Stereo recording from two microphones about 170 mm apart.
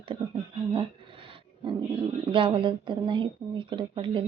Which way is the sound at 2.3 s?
30° right (ahead or behind).